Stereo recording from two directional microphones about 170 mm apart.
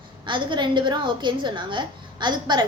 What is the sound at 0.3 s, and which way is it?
A woman's voice, 30° right (ahead or behind).